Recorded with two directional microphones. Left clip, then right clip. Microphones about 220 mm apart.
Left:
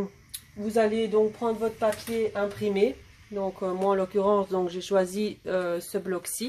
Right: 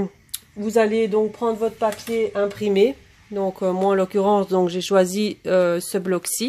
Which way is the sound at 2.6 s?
45° right (ahead or behind).